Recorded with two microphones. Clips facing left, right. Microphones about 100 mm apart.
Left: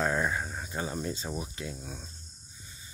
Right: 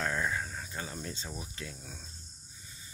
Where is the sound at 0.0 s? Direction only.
25° left (ahead or behind).